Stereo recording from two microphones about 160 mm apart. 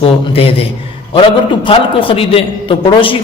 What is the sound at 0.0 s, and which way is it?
A man's voice, 35° left (ahead or behind).